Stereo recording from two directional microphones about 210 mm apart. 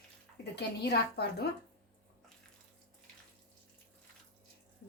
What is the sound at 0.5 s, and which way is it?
Speech, 50° left (ahead or behind).